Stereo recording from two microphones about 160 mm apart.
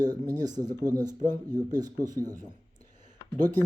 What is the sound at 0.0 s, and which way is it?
Speech, 25° right (ahead or behind).